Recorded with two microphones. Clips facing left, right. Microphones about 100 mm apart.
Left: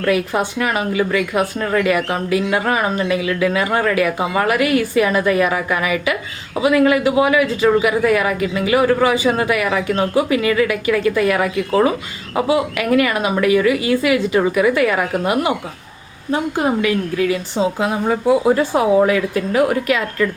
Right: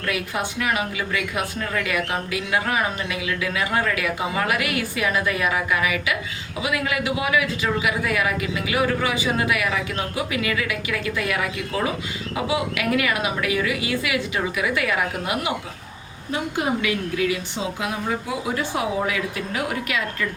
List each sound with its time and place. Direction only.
0.0 s a man's voice: 40° left (ahead or behind)